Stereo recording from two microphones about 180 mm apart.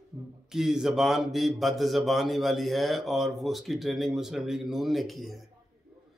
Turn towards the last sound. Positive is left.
turn(degrees=0)  # may be behind; listen again after turning